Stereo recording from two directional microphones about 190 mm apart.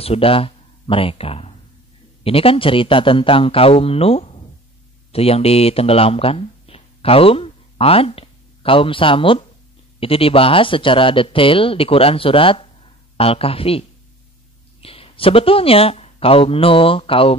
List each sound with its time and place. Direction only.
0.0 s speech: 30° left (ahead or behind)